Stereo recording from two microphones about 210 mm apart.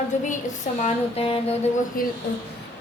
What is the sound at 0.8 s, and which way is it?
Music, 30° left (ahead or behind).